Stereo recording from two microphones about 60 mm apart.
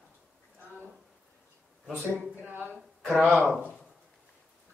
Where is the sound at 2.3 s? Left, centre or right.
Right.